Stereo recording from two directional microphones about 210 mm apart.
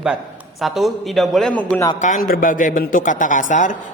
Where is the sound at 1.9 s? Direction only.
35° left (ahead or behind).